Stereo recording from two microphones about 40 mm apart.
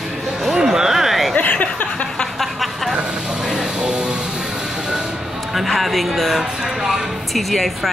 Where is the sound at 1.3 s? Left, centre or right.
Left.